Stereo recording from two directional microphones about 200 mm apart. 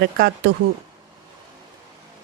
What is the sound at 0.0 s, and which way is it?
Speech, 55° right (ahead or behind).